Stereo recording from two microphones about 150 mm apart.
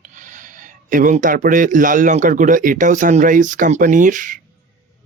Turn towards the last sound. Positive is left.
turn(degrees=-60)  # may be behind; listen again after turning